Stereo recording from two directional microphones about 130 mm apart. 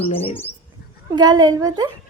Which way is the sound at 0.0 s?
50° left (ahead or behind).